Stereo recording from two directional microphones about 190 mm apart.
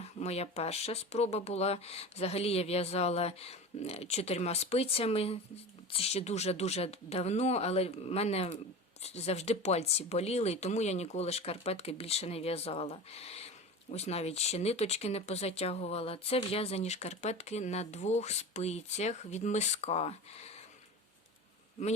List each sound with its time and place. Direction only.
0.0 s speech: 35° left (ahead or behind)